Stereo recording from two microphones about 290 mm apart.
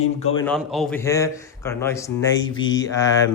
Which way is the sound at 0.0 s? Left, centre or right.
Left.